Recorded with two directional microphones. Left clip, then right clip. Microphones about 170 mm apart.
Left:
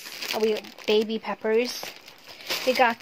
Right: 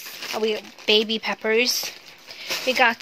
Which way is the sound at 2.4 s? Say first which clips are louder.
Right 2 dB; 20° left (ahead or behind).